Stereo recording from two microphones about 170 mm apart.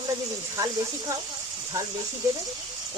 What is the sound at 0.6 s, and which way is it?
Speech, 20° right (ahead or behind).